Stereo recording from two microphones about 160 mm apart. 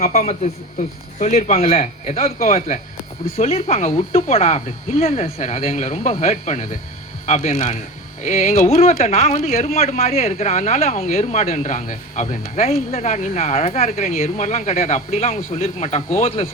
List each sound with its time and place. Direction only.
0.8 s speech: 45° left (ahead or behind)
3.3 s speech: 40° left (ahead or behind)